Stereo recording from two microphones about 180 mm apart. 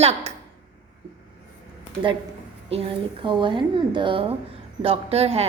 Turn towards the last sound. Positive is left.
turn(degrees=-35)  # may be behind; listen again after turning